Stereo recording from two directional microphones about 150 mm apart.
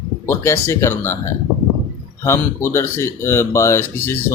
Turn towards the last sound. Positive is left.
turn(degrees=15)  # may be behind; listen again after turning